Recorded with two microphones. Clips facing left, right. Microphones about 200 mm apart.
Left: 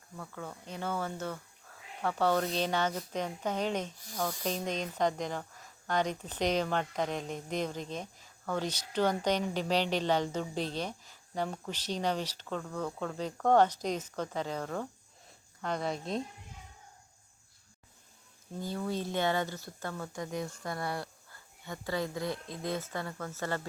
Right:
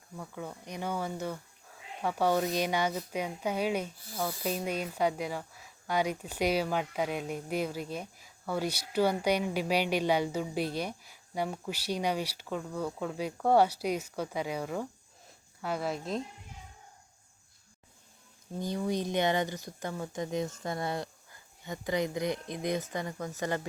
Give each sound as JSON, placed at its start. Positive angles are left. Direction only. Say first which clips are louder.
{"t": 0.2, "sound": "speech", "louder": "right 2 dB", "side_deg": -15}
{"t": 18.6, "sound": "speech", "louder": "right 3 dB", "side_deg": -15}